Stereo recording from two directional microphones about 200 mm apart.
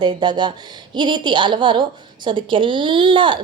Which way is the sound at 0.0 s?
20° right (ahead or behind).